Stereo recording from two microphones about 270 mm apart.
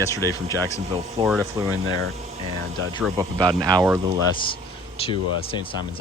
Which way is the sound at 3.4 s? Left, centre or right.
Centre.